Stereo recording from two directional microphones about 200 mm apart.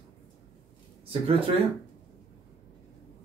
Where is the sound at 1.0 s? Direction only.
25° right (ahead or behind).